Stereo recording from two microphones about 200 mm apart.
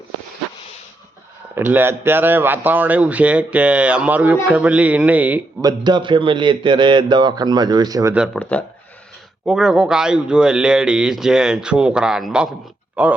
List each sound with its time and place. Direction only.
1.5 s speech: 10° right (ahead or behind)
5.6 s a man's voice: 20° right (ahead or behind)
8.1 s a man's voice: 5° right (ahead or behind)
8.4 s a man's voice: 5° left (ahead or behind)